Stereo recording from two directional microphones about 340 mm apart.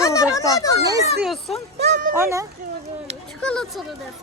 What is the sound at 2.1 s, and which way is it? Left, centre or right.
Speech, centre.